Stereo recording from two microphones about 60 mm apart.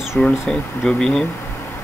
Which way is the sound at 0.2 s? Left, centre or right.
Centre.